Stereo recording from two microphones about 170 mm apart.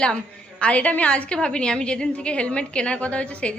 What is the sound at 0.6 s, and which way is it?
A woman's voice, 10° left (ahead or behind).